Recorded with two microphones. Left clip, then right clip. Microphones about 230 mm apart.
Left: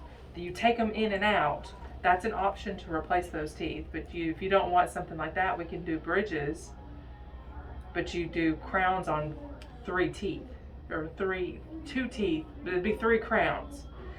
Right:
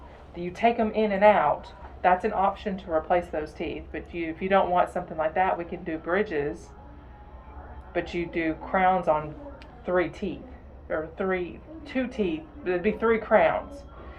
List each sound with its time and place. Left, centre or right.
0.3 s speech: centre
7.9 s speech: centre